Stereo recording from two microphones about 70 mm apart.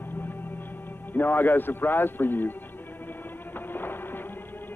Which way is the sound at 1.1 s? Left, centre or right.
Left.